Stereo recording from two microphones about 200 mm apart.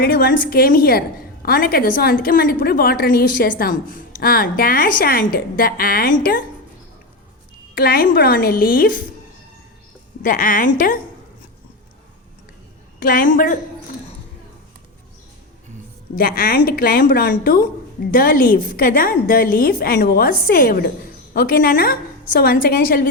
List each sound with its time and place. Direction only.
0.0 s speech: 50° left (ahead or behind)
7.8 s speech: 50° left (ahead or behind)
10.2 s speech: 45° left (ahead or behind)
13.0 s a woman's voice: 45° left (ahead or behind)
16.1 s speech: 50° left (ahead or behind)